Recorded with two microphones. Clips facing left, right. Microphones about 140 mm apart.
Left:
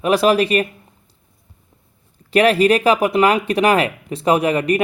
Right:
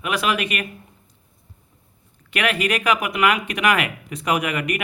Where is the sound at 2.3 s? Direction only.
35° left (ahead or behind).